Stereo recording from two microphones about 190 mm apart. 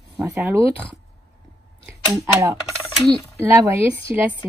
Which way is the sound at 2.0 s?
15° right (ahead or behind).